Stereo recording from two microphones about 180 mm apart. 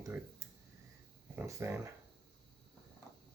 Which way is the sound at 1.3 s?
15° right (ahead or behind).